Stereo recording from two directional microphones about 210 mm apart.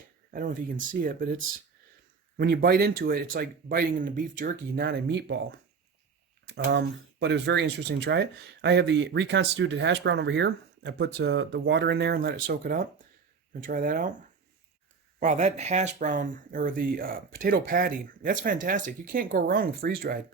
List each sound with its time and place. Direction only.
0.3 s speech: 40° right (ahead or behind)
2.4 s speech: 45° right (ahead or behind)
15.2 s speech: 35° right (ahead or behind)